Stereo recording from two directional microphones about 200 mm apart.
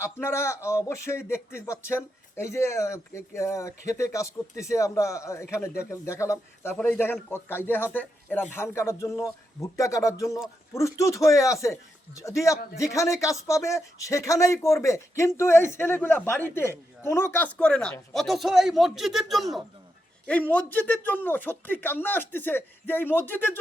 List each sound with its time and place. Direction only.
0.0 s speech: 10° left (ahead or behind)